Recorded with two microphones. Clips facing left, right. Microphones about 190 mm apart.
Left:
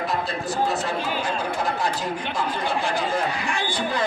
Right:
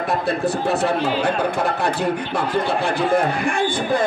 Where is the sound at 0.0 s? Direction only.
60° right (ahead or behind).